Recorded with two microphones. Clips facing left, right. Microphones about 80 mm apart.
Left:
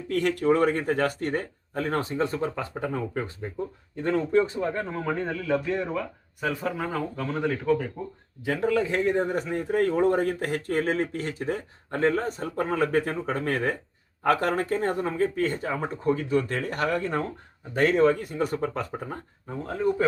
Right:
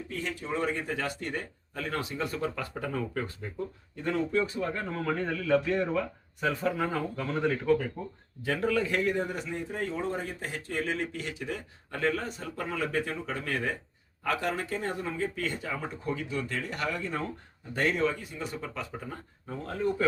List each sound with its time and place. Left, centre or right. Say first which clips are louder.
0.1 s a man's voice: left 13 dB; left
4.6 s speech: left 3 dB; centre
8.4 s a man's voice: left 3 dB; centre; by 19.2 s left
19.5 s speech: left 4 dB; centre